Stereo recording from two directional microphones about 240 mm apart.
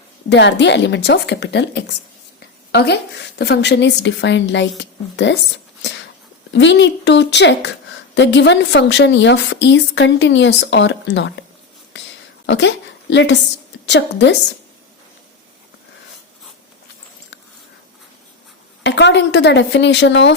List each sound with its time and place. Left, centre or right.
0.3 s a woman's voice: left
6.5 s a woman's voice: left
12.5 s a woman's voice: left
18.8 s speech: left